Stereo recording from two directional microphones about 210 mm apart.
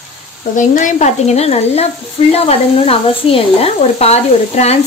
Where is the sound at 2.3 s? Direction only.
30° left (ahead or behind).